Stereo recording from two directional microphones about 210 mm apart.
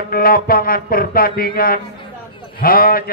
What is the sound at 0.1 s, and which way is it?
Speech, 45° left (ahead or behind).